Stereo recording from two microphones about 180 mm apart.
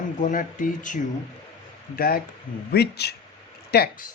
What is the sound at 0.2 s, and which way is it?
Speech, 45° left (ahead or behind).